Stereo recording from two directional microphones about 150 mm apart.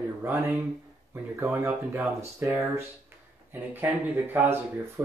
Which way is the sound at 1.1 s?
15° right (ahead or behind).